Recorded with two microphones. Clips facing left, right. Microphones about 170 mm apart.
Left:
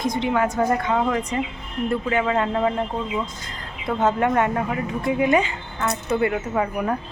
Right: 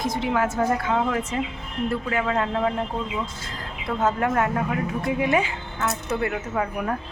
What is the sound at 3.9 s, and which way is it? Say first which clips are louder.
Speech: left 3 dB; centre (ahead or behind).